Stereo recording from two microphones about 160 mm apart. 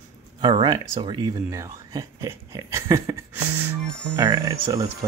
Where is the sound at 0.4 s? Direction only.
25° right (ahead or behind).